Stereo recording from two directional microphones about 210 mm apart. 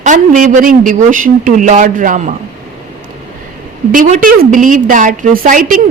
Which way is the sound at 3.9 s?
40° right (ahead or behind).